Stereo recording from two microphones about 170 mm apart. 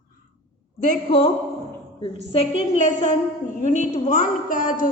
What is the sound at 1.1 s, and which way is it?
Speech, 35° left (ahead or behind).